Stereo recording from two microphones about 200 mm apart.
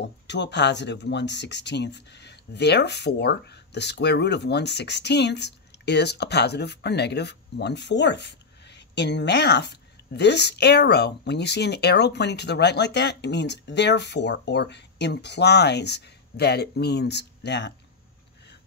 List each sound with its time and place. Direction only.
0.0 s speech: 60° left (ahead or behind)